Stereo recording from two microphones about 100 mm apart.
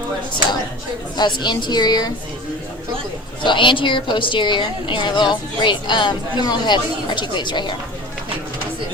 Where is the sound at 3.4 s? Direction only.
55° left (ahead or behind).